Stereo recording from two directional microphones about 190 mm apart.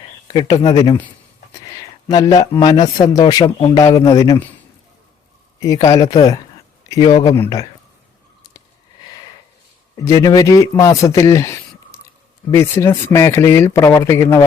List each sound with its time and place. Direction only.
0.3 s speech: 20° left (ahead or behind)
5.5 s speech: 15° left (ahead or behind)
10.0 s speech: 15° left (ahead or behind)